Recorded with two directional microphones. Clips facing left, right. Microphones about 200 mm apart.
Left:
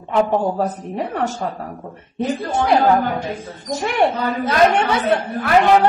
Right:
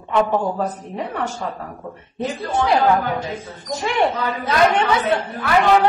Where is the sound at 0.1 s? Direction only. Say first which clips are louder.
Left 1 dB; 35° left (ahead or behind).